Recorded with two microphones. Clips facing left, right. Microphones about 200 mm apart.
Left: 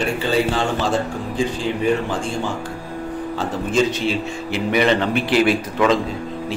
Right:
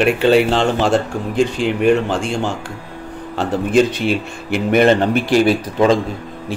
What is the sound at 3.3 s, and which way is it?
Speech, 60° right (ahead or behind).